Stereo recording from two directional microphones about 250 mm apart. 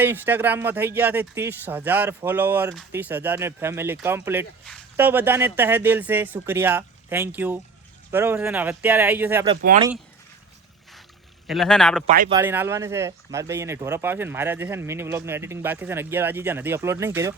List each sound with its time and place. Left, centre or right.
0.0 s speech: centre
11.4 s speech: centre
12.0 s speech: right
12.3 s speech: centre